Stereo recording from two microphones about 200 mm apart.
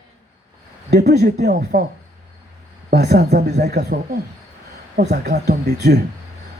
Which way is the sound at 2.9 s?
55° right (ahead or behind).